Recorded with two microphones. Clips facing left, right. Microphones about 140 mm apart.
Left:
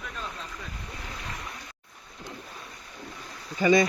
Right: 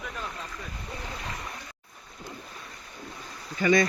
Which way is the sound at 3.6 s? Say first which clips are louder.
Left 2 dB; 20° left (ahead or behind).